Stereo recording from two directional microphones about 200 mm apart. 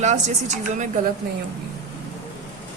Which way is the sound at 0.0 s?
35° right (ahead or behind).